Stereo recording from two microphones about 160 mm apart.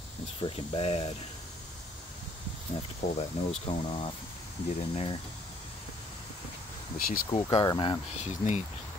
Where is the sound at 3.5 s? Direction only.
35° left (ahead or behind).